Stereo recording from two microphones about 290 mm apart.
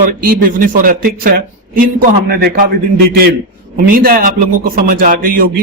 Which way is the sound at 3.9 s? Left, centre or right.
Right.